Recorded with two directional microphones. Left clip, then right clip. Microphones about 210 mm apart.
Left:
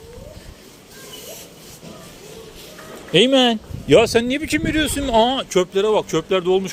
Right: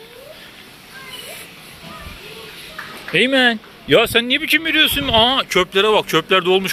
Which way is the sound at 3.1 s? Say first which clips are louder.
Even; 25° left (ahead or behind).